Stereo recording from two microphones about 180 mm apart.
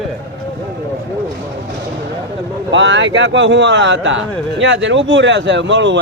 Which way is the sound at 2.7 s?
90° right.